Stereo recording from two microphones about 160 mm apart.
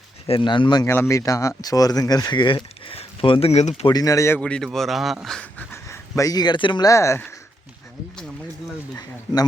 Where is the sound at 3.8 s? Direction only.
20° left (ahead or behind).